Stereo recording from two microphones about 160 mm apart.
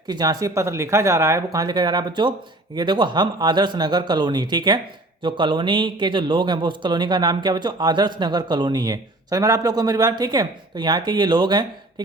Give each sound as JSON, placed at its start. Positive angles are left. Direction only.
{"t": 0.1, "sound": "a man's voice", "side_deg": -25}